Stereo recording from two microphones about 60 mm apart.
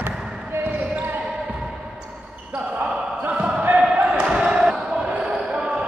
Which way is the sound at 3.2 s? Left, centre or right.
Centre.